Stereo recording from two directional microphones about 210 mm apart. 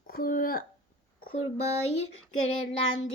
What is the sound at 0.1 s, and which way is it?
Speech, 45° left (ahead or behind).